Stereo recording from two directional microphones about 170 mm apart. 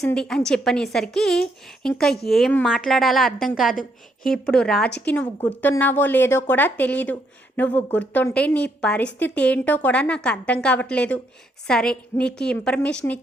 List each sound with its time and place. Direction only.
0.0 s a woman's voice: 5° left (ahead or behind)